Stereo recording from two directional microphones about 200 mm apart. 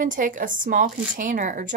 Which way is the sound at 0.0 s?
40° right (ahead or behind).